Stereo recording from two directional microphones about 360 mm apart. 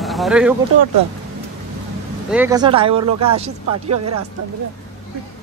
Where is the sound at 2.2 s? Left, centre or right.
Centre.